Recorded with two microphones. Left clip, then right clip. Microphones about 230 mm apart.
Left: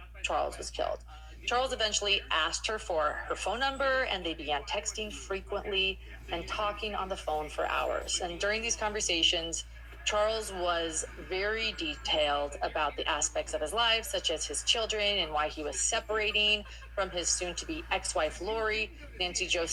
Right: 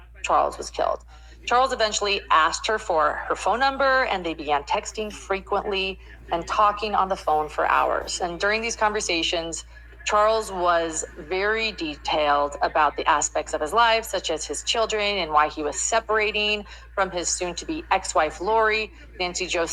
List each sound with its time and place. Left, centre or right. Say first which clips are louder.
0.2 s speech: right 10 dB; right